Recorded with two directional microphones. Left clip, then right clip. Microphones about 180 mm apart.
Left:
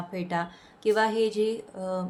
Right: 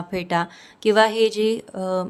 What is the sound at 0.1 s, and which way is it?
Speech, 50° right (ahead or behind).